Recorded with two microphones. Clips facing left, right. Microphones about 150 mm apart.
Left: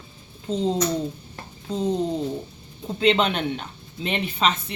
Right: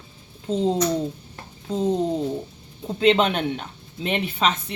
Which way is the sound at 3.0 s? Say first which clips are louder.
Right 2 dB; 50° right (ahead or behind).